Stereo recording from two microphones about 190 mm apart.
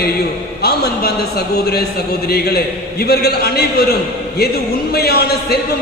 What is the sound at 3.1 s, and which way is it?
Speech, 55° left (ahead or behind).